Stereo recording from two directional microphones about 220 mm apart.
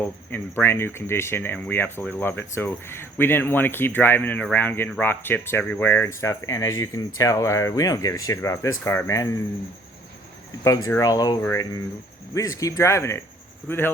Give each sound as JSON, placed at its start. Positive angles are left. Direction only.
{"t": 0.0, "sound": "speech", "side_deg": 10}
{"t": 10.6, "sound": "speech", "side_deg": 15}